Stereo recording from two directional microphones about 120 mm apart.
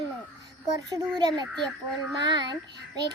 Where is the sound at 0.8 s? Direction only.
30° right (ahead or behind).